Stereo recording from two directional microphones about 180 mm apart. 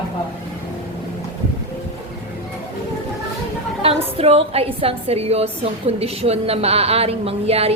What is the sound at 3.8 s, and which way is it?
A woman's voice, 35° right (ahead or behind).